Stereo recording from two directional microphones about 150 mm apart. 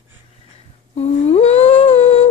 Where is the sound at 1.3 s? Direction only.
40° left (ahead or behind).